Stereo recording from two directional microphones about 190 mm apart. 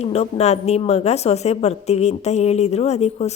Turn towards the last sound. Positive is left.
turn(degrees=35)  # may be behind; listen again after turning